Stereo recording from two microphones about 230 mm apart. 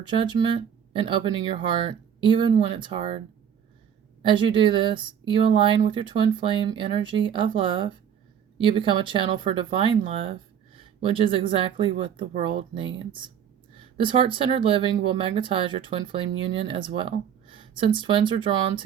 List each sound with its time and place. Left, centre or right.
0.0 s speech: centre